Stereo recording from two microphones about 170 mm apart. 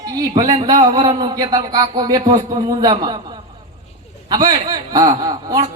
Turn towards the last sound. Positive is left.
turn(degrees=-20)  # may be behind; listen again after turning